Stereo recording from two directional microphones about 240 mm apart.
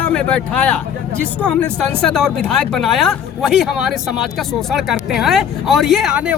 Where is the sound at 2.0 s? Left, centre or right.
Centre.